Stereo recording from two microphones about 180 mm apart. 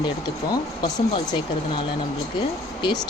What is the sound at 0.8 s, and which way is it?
Speech, 25° left (ahead or behind).